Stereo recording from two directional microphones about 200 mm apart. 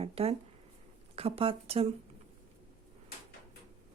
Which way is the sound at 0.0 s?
30° right (ahead or behind).